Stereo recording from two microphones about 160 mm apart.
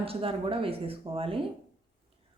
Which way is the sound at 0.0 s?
35° right (ahead or behind).